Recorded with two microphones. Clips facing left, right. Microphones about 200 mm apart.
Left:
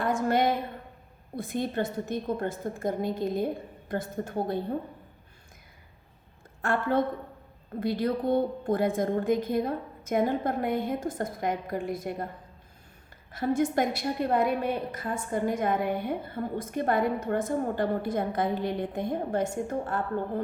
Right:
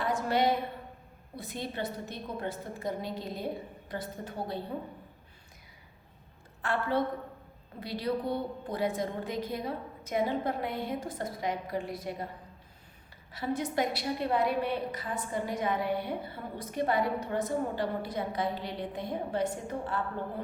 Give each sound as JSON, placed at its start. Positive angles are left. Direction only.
{"t": 0.0, "sound": "a sound", "side_deg": 50}
{"t": 1.4, "sound": "a woman's voice", "side_deg": 50}
{"t": 6.6, "sound": "a woman's voice", "side_deg": 45}
{"t": 13.3, "sound": "a woman's voice", "side_deg": 50}